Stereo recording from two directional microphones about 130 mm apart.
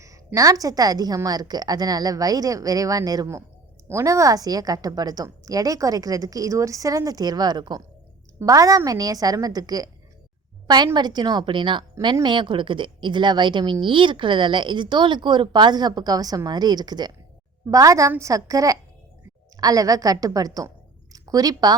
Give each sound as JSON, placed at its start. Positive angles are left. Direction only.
{"t": 0.3, "sound": "a woman's voice", "side_deg": -25}
{"t": 10.9, "sound": "a woman's voice", "side_deg": -35}